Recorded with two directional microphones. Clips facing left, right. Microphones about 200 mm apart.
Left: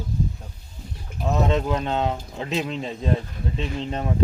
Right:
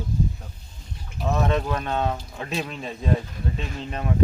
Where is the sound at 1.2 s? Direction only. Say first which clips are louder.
Left 1 dB; 20° left (ahead or behind).